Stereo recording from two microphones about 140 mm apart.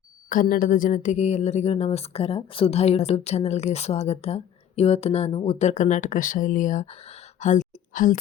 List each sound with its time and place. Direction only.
0.3 s speech: 80° left; by 6.8 s 65° left (ahead or behind)
7.3 s whispering: 60° left (ahead or behind)